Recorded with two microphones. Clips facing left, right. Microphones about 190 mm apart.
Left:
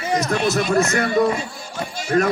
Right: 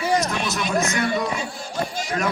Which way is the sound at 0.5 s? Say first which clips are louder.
Left 5 dB; 45° left (ahead or behind).